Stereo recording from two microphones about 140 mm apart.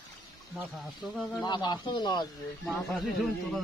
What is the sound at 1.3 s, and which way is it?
Speech, 30° left (ahead or behind).